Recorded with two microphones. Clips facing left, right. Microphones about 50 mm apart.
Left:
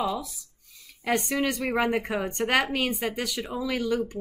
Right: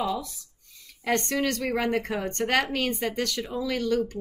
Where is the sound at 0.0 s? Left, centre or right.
Centre.